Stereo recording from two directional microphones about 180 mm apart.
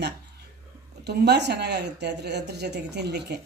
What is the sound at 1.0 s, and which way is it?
A woman's voice, 70° right (ahead or behind).